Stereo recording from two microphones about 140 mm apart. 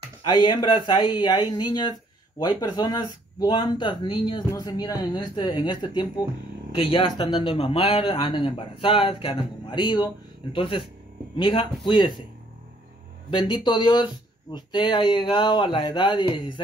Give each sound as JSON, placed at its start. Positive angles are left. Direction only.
{"t": 0.3, "sound": "speech", "side_deg": 30}
{"t": 13.3, "sound": "speech", "side_deg": 35}